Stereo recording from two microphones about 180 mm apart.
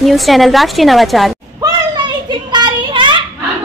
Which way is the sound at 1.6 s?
25° right (ahead or behind).